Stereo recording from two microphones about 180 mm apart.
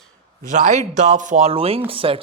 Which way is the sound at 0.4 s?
45° right (ahead or behind).